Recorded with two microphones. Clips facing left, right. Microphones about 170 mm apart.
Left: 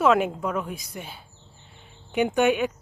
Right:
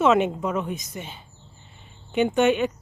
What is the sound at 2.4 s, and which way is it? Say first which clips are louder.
Speech: right 1 dB; 10° left (ahead or behind).